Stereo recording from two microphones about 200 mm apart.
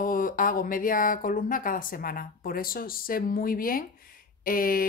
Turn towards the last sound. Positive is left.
turn(degrees=45)  # may be behind; listen again after turning